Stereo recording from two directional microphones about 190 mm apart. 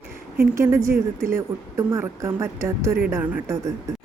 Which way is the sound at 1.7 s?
15° right (ahead or behind).